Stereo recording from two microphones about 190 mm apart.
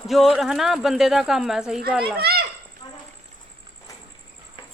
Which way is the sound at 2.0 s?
55° right (ahead or behind).